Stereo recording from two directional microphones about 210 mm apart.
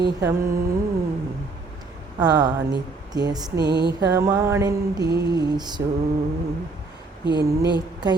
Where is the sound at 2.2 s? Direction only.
20° right (ahead or behind).